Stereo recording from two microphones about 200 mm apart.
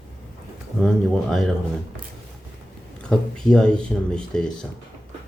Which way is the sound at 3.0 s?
5° left (ahead or behind).